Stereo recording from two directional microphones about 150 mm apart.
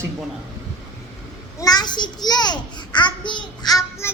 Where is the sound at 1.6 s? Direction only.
25° left (ahead or behind).